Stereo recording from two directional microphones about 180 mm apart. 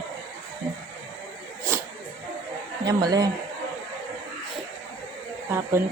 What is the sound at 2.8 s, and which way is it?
Speech, 20° right (ahead or behind).